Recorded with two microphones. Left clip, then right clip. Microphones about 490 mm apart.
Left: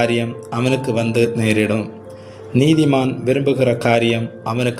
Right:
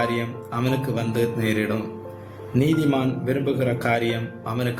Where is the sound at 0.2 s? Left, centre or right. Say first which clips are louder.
Left 6 dB; right.